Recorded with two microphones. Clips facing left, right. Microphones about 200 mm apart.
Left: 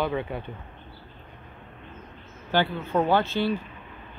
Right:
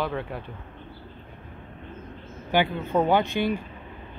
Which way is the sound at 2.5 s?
15° right (ahead or behind).